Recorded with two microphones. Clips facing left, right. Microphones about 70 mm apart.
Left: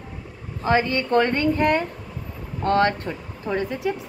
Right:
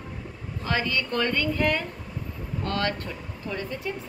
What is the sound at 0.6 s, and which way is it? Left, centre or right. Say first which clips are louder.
A woman's voice: left 7 dB; left.